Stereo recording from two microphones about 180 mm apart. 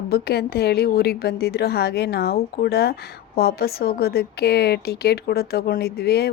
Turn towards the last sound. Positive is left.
turn(degrees=60)  # may be behind; listen again after turning